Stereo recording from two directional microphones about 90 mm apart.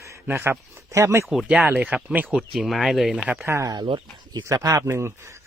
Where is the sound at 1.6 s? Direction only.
15° right (ahead or behind).